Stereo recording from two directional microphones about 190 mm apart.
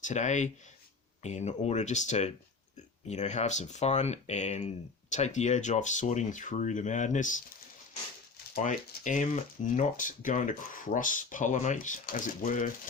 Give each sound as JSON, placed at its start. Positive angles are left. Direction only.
{"t": 0.0, "sound": "speech", "side_deg": 40}
{"t": 8.5, "sound": "speech", "side_deg": 45}